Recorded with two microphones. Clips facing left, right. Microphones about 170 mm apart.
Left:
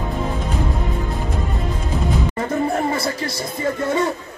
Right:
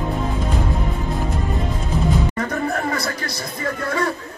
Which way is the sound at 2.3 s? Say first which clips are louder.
Left 2 dB; 25° left (ahead or behind).